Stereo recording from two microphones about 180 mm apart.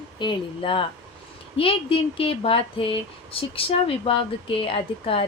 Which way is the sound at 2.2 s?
30° left (ahead or behind).